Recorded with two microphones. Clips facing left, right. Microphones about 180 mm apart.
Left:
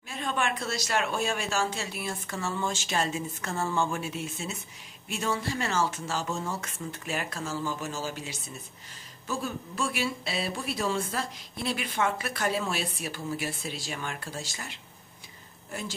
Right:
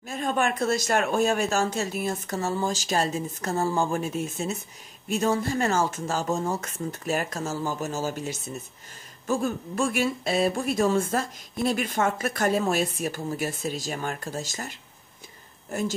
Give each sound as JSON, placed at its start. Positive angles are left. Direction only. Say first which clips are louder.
{"t": 0.1, "sound": "speech", "louder": "right 5 dB", "side_deg": -45}